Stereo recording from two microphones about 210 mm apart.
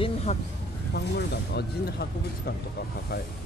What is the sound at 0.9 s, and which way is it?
Speech, 50° left (ahead or behind).